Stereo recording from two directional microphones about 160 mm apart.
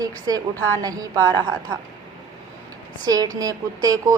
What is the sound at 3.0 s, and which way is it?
A woman's voice, 25° right (ahead or behind).